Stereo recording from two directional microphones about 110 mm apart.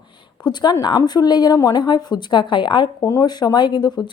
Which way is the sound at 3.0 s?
35° left (ahead or behind).